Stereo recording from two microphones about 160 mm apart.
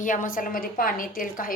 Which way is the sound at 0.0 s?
55° left (ahead or behind).